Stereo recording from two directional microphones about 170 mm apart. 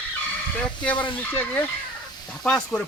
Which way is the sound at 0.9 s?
30° left (ahead or behind).